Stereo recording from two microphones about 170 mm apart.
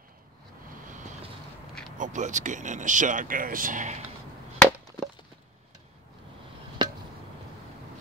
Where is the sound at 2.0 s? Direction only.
45° right (ahead or behind).